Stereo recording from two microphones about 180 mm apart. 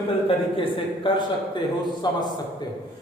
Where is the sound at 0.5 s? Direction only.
30° left (ahead or behind).